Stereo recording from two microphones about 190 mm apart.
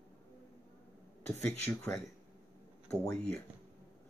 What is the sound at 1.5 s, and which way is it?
Speech, 5° left (ahead or behind).